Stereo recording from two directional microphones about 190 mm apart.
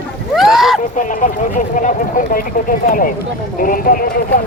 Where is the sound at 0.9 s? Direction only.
45° left (ahead or behind).